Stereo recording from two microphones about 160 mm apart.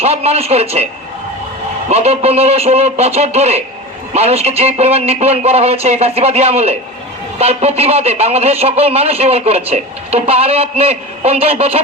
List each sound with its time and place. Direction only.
0.0 s a man's voice: 40° right (ahead or behind)
1.9 s a man's voice: 40° right (ahead or behind)